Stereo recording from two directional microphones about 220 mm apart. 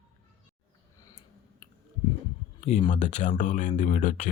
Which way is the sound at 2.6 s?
30° left (ahead or behind).